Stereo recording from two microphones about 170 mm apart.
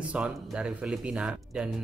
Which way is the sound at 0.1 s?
5° right (ahead or behind).